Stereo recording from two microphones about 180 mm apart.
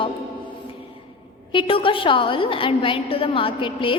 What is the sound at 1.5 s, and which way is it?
A woman's voice, 30° left (ahead or behind).